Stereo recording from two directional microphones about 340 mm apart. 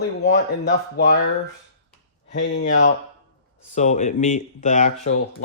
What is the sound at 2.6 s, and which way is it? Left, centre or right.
Speech, left.